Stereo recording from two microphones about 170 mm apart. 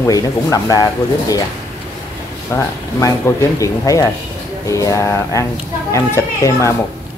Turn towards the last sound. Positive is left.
turn(degrees=15)  # may be behind; listen again after turning